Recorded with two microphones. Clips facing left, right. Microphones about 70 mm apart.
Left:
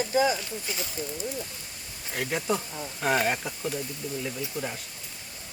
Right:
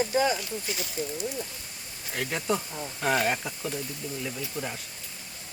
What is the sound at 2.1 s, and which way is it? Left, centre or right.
Speech, centre.